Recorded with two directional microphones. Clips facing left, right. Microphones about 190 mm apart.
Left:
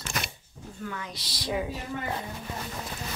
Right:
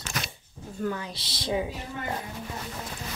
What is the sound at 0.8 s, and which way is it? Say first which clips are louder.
Speech: right 6 dB; 35° right (ahead or behind).